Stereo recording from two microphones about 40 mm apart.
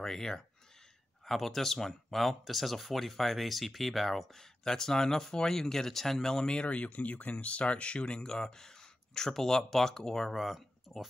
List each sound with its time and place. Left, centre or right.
0.0 s speech: centre
6.4 s speech: left; by 11.1 s centre